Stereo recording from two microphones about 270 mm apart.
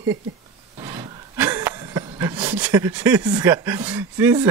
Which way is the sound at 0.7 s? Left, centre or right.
Centre.